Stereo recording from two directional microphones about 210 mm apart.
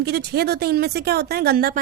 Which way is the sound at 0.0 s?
50° right (ahead or behind).